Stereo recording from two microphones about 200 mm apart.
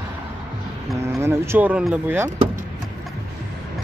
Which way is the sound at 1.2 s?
10° right (ahead or behind).